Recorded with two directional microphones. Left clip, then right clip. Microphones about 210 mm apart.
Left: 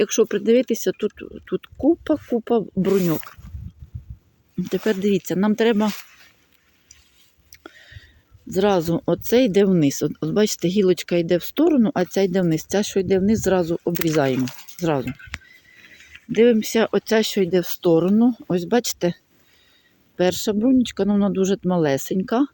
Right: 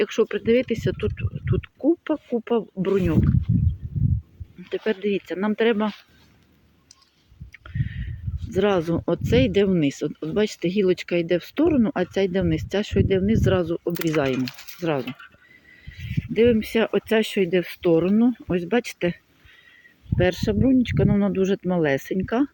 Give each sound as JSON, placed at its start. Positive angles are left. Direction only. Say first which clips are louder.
{"t": 0.0, "sound": "speech", "louder": "left 3 dB", "side_deg": 15}
{"t": 4.7, "sound": "speech", "louder": "left 3 dB", "side_deg": 25}
{"t": 7.5, "sound": "speech", "louder": "right 4 dB", "side_deg": 20}